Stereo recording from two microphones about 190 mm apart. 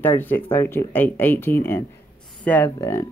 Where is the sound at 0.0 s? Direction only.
10° left (ahead or behind).